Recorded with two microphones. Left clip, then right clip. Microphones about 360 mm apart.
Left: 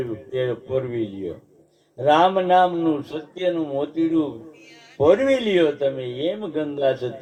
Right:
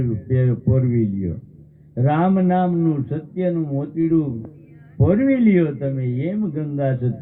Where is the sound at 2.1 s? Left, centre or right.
Left.